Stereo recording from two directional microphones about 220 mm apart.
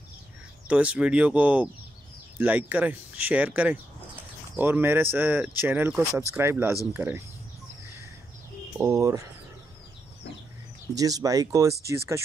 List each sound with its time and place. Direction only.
0.7 s speech: 5° right (ahead or behind)
8.7 s speech: 15° right (ahead or behind)
11.0 s speech: 15° right (ahead or behind)